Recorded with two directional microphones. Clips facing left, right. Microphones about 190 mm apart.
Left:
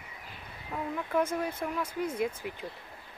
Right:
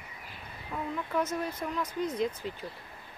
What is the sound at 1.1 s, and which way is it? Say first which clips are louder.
Speech: left 3 dB; 10° left (ahead or behind).